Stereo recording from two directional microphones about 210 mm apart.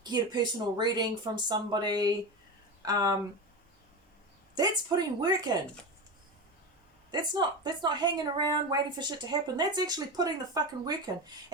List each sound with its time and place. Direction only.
0.0 s a woman's voice: 20° right (ahead or behind)
4.5 s a woman's voice: 20° right (ahead or behind)
7.1 s a woman's voice: 20° right (ahead or behind)